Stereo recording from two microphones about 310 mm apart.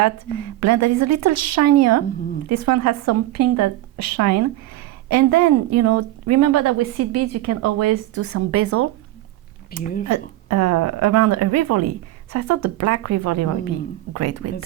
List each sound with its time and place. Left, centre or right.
0.0 s a woman's voice: right
9.7 s speech: left
10.1 s a woman's voice: right